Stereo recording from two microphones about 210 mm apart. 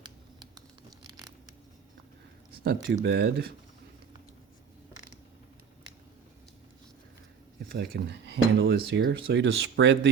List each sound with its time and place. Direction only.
0.0 s a sound: 20° right (ahead or behind)
2.6 s speech: 55° right (ahead or behind)
7.7 s speech: 50° right (ahead or behind)